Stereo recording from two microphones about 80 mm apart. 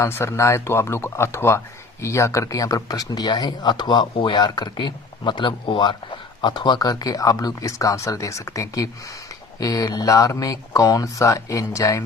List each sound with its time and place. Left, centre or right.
0.0 s speech: left